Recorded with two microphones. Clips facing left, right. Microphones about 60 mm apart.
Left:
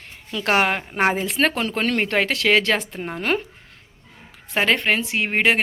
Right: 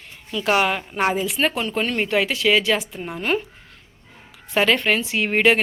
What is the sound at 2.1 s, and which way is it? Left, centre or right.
Speech, left.